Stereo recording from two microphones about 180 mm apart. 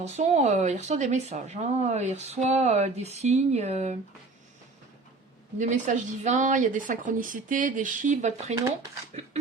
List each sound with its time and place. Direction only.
0.0 s speech: 35° right (ahead or behind)
5.5 s speech: 45° right (ahead or behind)
9.1 s a sound: 40° right (ahead or behind)